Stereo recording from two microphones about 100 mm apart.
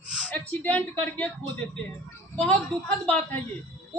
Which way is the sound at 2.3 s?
10° left (ahead or behind).